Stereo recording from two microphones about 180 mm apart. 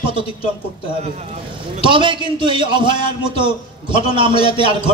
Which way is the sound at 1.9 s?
25° right (ahead or behind).